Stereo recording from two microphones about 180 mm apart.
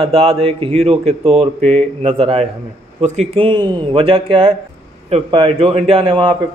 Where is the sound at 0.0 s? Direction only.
30° right (ahead or behind).